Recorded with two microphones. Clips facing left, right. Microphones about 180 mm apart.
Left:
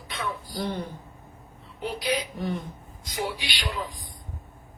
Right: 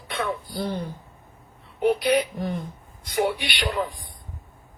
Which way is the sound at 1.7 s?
60° right (ahead or behind).